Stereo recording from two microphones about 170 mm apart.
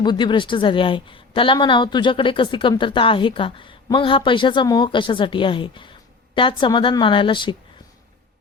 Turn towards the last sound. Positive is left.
turn(degrees=30)  # may be behind; listen again after turning